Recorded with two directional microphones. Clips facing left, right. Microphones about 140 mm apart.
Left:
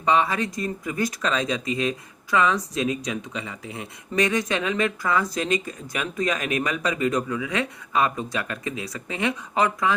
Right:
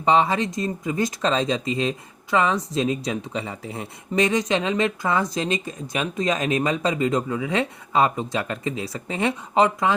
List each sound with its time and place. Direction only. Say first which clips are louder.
0.0 s speech: right 2 dB; 25° right (ahead or behind)
4.1 s speech: right 2 dB; 25° right (ahead or behind)